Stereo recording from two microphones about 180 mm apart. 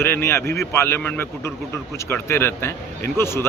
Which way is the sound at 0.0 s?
15° left (ahead or behind).